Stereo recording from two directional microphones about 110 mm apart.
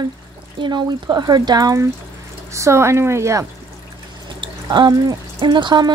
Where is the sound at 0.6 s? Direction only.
45° right (ahead or behind); by 3.4 s 25° right (ahead or behind).